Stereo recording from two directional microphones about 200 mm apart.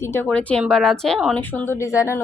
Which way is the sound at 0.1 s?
10° left (ahead or behind).